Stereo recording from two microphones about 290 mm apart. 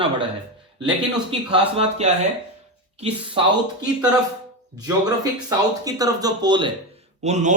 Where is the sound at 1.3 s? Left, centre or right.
Right.